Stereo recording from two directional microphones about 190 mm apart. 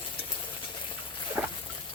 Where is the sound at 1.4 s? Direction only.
10° right (ahead or behind).